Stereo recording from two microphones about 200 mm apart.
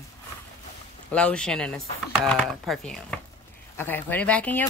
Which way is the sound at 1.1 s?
5° left (ahead or behind).